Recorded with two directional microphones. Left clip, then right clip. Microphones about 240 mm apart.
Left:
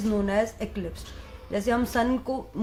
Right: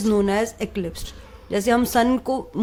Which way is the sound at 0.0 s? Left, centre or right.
Right.